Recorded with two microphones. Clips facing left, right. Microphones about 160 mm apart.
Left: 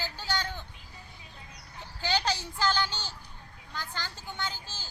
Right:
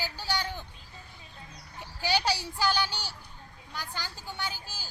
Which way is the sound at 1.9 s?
10° right (ahead or behind).